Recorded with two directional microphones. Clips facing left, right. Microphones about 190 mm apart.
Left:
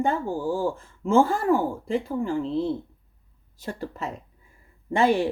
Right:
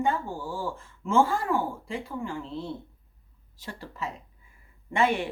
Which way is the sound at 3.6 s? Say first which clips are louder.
Left 5 dB; 50° left (ahead or behind).